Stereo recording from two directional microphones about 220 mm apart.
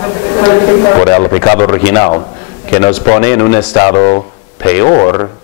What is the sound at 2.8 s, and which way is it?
A man's voice, 25° left (ahead or behind).